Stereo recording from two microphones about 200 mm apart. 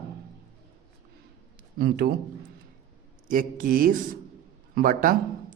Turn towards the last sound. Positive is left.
turn(degrees=-45)  # may be behind; listen again after turning